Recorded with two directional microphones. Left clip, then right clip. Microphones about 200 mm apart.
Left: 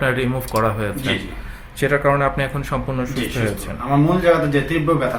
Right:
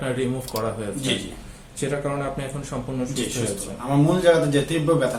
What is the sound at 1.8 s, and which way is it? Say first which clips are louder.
Speech: left 9 dB; 40° left (ahead or behind).